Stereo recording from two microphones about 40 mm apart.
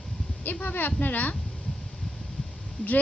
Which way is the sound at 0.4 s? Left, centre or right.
Left.